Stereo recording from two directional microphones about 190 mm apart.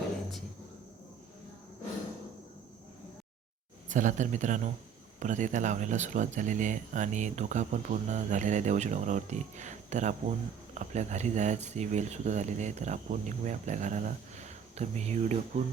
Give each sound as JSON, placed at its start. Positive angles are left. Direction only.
{"t": 3.8, "sound": "speech", "side_deg": -40}